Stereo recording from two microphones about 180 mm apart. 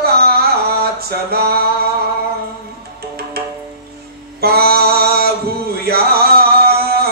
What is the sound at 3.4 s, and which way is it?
Music, 60° right (ahead or behind).